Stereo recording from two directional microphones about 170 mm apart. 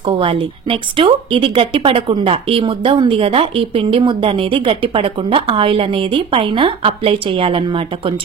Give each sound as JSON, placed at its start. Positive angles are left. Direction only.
{"t": 0.0, "sound": "speech", "side_deg": -30}